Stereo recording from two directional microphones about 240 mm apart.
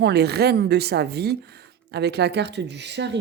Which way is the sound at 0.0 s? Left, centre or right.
Right.